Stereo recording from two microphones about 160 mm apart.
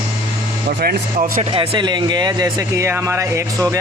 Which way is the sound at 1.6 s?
30° right (ahead or behind).